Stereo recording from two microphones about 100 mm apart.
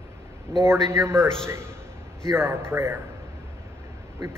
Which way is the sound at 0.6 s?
30° right (ahead or behind).